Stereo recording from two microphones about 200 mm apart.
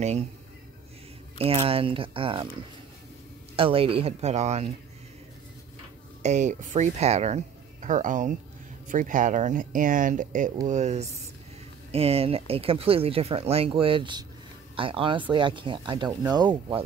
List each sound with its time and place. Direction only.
1.4 s speech: 30° right (ahead or behind)
3.5 s speech: 25° right (ahead or behind)
6.2 s speech: 35° right (ahead or behind)